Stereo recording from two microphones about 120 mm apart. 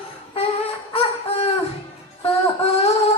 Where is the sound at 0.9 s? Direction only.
55° left (ahead or behind).